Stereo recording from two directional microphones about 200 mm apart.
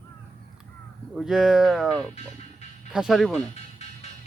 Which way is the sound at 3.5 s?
35° left (ahead or behind).